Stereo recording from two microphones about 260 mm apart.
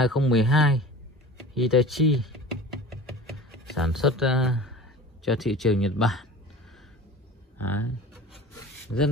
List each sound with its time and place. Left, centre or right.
0.0 s speech: centre
1.5 s a sound: centre
3.7 s speech: centre
7.5 s speech: left